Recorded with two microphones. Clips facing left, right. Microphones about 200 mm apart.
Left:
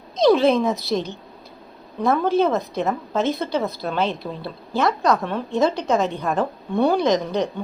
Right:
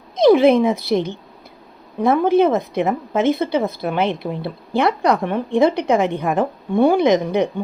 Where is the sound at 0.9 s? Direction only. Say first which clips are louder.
Right 5 dB; 55° right (ahead or behind).